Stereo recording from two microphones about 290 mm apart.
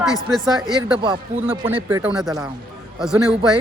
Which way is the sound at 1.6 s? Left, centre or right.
Centre.